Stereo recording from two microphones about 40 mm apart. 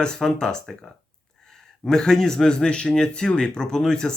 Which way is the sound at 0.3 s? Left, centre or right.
Centre.